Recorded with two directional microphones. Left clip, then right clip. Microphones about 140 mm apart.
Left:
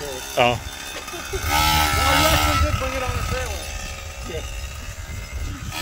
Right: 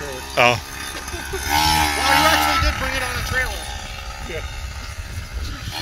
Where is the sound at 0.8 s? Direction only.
30° left (ahead or behind).